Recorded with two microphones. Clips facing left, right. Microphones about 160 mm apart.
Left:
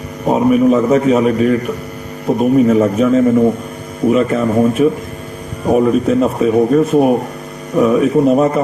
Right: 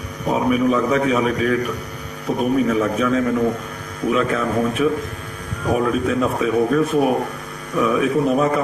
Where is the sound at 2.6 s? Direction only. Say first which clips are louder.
Left 7 dB; 25° left (ahead or behind).